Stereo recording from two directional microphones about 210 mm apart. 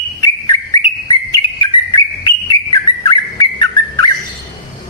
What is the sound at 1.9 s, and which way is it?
Bird, 20° left (ahead or behind).